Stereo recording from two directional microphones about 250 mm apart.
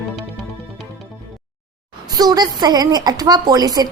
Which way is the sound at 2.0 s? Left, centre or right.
Centre.